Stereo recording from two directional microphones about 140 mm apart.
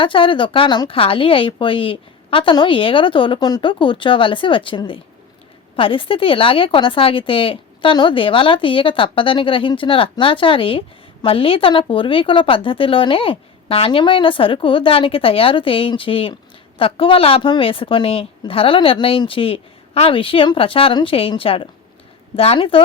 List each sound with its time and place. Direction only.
0.0 s speech: 40° left (ahead or behind)